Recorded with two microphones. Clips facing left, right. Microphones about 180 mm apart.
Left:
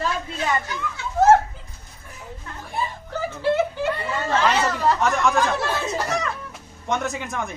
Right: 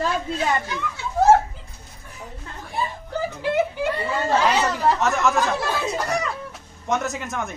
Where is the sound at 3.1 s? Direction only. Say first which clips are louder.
Left 4 dB; 15° right (ahead or behind).